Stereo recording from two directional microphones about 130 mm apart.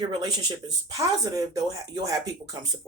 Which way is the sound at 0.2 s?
30° right (ahead or behind).